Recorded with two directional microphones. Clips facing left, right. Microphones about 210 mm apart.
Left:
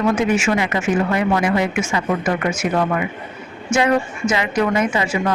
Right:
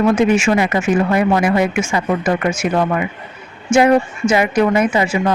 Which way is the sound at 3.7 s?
30° right (ahead or behind).